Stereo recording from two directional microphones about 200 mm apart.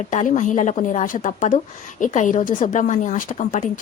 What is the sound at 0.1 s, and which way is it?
Speech, 35° left (ahead or behind).